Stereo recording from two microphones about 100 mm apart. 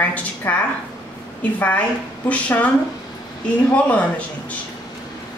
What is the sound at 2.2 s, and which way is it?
Speech, 15° left (ahead or behind).